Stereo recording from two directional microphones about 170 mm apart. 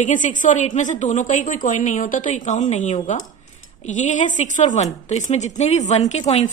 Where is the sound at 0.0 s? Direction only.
50° left (ahead or behind).